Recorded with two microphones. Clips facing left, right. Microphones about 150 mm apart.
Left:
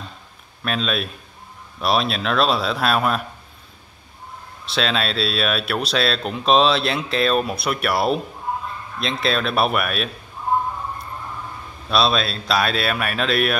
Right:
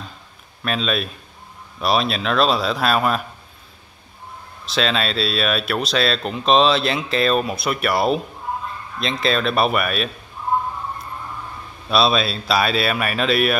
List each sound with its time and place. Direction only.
0.7 s speech: centre (ahead or behind)
4.6 s speech: centre (ahead or behind)
11.9 s speech: centre (ahead or behind)